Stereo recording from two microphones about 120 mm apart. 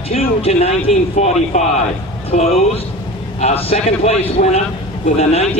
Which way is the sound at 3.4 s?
60° left (ahead or behind).